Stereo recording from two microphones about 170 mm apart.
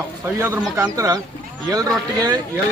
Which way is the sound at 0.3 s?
15° right (ahead or behind).